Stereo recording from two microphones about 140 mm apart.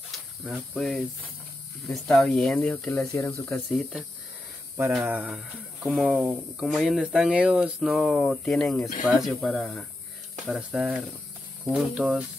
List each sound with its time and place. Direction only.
0.1 s snake: centre (ahead or behind)
1.9 s speech: 5° left (ahead or behind)
4.7 s speech: 5° right (ahead or behind)
10.4 s speech: 10° right (ahead or behind)